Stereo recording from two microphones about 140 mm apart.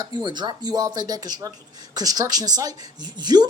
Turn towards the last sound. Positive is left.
turn(degrees=-30)  # may be behind; listen again after turning